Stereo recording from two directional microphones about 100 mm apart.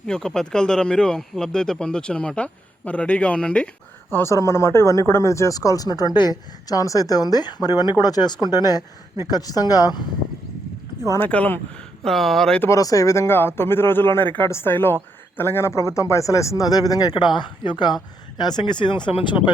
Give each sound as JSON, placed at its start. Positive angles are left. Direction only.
{"t": 0.0, "sound": "speech", "side_deg": 5}
{"t": 4.1, "sound": "speech", "side_deg": 30}
{"t": 11.2, "sound": "speech", "side_deg": 15}
{"t": 12.0, "sound": "speech", "side_deg": 5}
{"t": 12.7, "sound": "speech", "side_deg": 35}